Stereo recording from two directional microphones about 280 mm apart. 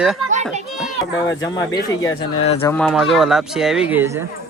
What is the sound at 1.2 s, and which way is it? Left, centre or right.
Speech, centre.